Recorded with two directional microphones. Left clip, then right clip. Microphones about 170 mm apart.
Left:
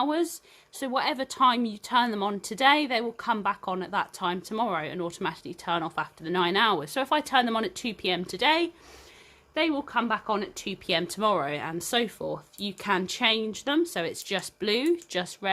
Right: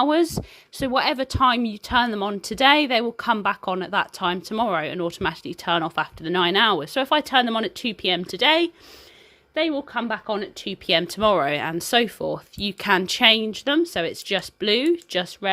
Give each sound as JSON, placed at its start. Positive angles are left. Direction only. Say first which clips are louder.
{"t": 0.0, "sound": "speech", "louder": "right 7 dB", "side_deg": -40}